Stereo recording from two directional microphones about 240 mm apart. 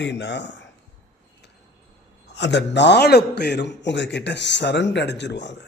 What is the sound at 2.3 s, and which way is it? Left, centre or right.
A man's voice, left.